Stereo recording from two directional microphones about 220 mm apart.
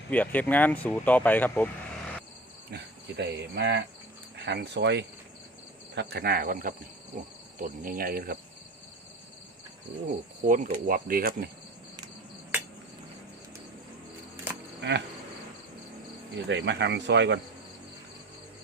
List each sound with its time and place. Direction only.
0.1 s speech: 5° left (ahead or behind)
2.6 s speech: 50° right (ahead or behind)
7.6 s cricket: 40° right (ahead or behind)
10.4 s cricket: 35° right (ahead or behind)
12.5 s cricket: 10° right (ahead or behind)
14.8 s cricket: 50° right (ahead or behind)
16.3 s speech: 55° right (ahead or behind)